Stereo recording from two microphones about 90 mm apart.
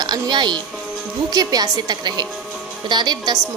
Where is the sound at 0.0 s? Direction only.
55° right (ahead or behind).